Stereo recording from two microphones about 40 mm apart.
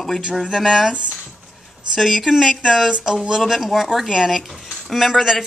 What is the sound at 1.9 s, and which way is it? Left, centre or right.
Speech, centre.